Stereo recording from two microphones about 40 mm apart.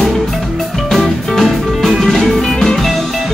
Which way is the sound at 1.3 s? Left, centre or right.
Centre.